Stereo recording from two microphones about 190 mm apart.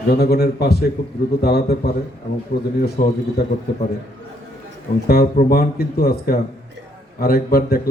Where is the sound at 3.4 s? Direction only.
55° left (ahead or behind).